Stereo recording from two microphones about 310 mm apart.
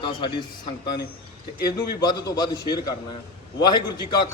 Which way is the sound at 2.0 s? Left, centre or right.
Centre.